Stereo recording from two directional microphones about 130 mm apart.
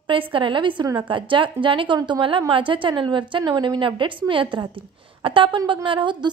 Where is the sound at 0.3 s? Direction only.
40° right (ahead or behind).